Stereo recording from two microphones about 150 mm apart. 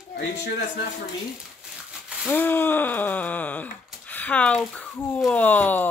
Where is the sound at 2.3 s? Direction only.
15° left (ahead or behind).